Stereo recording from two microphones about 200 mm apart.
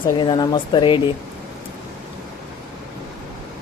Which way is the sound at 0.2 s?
20° left (ahead or behind).